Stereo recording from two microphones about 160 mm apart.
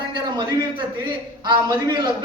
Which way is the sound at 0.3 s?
30° right (ahead or behind).